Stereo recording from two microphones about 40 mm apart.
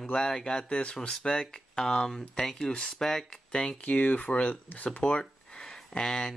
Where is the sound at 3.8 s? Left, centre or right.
Left.